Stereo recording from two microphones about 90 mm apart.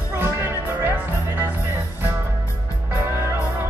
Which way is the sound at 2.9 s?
30° right (ahead or behind).